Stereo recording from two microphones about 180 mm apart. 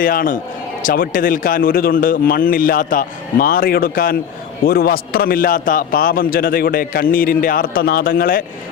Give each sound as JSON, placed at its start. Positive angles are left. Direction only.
{"t": 0.0, "sound": "a man's voice", "side_deg": 50}